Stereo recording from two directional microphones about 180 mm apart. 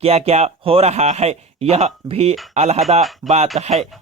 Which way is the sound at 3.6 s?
35° right (ahead or behind).